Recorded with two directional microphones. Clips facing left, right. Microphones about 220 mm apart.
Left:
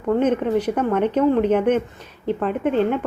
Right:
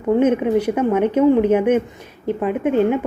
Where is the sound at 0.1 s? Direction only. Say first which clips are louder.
Right 3 dB; 10° right (ahead or behind).